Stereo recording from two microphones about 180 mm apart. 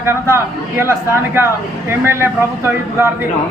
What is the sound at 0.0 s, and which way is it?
Speech, 15° right (ahead or behind).